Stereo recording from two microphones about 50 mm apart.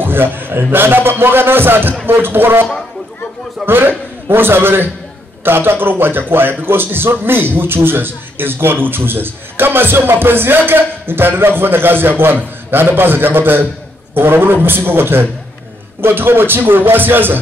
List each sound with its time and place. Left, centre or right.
0.0 s a man's voice: right